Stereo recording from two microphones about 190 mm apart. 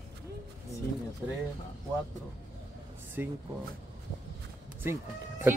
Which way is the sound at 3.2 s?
10° right (ahead or behind).